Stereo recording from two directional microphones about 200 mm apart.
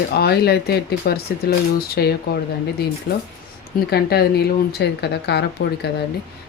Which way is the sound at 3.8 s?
50° left (ahead or behind).